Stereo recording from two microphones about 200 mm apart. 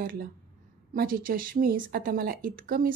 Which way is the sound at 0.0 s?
45° right (ahead or behind).